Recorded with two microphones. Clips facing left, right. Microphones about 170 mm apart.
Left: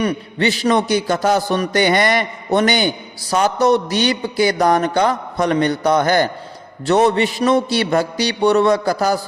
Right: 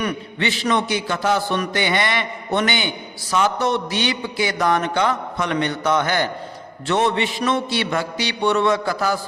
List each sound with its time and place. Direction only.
0.0 s a man's voice: 35° left (ahead or behind)